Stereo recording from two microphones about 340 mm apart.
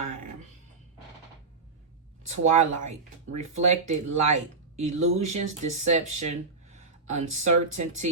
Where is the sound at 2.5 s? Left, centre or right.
Centre.